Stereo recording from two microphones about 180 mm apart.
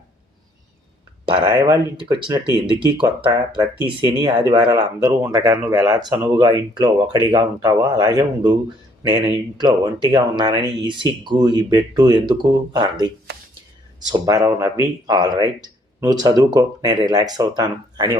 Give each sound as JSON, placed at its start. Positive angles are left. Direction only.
{"t": 1.2, "sound": "speech", "side_deg": -25}
{"t": 14.1, "sound": "speech", "side_deg": -20}